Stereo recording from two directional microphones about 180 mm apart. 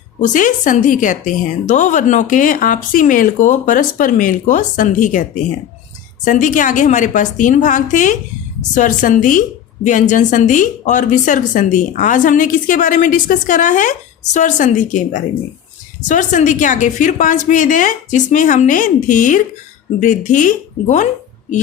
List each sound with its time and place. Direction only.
0.3 s a woman's voice: 45° left (ahead or behind)